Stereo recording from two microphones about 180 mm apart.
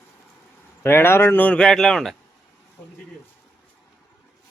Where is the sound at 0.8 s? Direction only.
15° left (ahead or behind).